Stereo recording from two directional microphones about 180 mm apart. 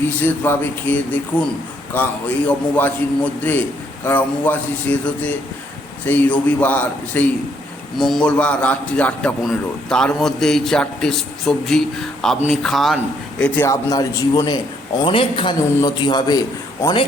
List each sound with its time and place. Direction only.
0.2 s a man's voice: 10° left (ahead or behind)
4.0 s a man's voice: 10° left (ahead or behind)
13.4 s a man's voice: 15° left (ahead or behind)